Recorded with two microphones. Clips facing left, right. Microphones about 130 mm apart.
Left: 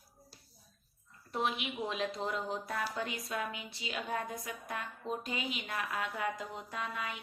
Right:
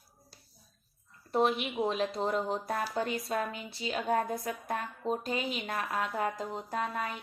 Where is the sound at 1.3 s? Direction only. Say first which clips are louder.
Right 7 dB; 40° right (ahead or behind).